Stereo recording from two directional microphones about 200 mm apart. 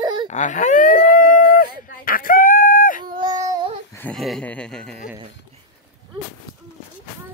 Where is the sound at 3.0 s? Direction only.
20° right (ahead or behind).